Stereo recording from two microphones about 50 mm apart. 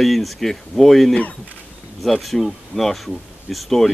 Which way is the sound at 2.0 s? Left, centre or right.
Centre.